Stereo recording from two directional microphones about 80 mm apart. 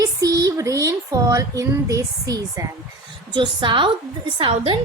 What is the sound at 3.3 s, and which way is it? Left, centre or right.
Speech, right.